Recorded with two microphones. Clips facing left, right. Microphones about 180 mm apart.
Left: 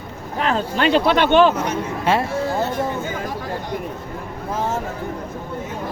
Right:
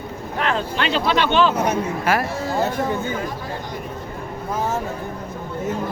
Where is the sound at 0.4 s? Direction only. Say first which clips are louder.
Left 4 dB; 40° left (ahead or behind).